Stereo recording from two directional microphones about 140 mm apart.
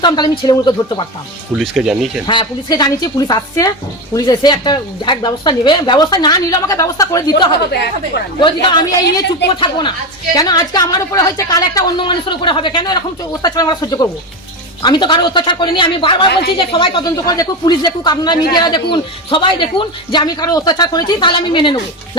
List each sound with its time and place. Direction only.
0.0 s a man's voice: 30° left (ahead or behind)
1.5 s speech: 5° right (ahead or behind)
2.2 s a man's voice: 35° left (ahead or behind)